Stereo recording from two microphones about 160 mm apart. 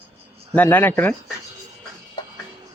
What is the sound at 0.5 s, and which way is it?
Speech, 10° left (ahead or behind).